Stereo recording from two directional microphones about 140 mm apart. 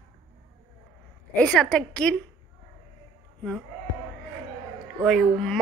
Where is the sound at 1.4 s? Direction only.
5° left (ahead or behind).